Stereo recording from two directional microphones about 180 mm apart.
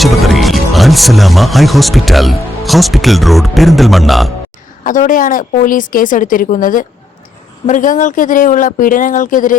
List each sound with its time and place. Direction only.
0.0 s speech: centre (ahead or behind)
4.8 s speech: 45° left (ahead or behind)